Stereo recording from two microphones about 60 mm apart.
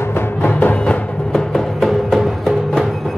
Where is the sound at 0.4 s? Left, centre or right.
Left.